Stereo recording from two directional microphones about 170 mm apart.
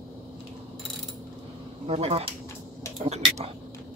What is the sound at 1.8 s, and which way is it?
Speech, 35° right (ahead or behind).